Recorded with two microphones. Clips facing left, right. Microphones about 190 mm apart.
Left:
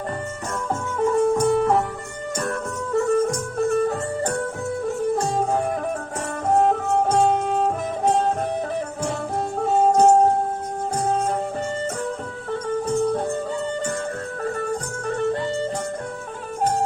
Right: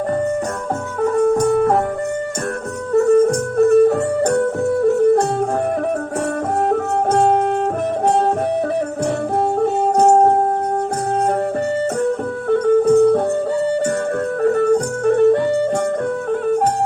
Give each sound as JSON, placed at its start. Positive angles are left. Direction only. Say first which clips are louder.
{"t": 1.0, "sound": "music", "louder": "right 4 dB", "side_deg": -60}
{"t": 1.4, "sound": "music", "louder": "right 4 dB", "side_deg": -50}
{"t": 3.0, "sound": "music", "louder": "right 8 dB", "side_deg": -60}
{"t": 6.5, "sound": "music", "louder": "left 2 dB", "side_deg": -65}
{"t": 9.4, "sound": "music", "louder": "right 1 dB", "side_deg": -65}
{"t": 14.4, "sound": "music", "louder": "right 12 dB", "side_deg": -65}